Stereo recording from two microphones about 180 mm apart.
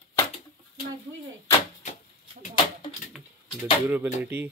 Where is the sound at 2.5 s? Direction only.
25° left (ahead or behind).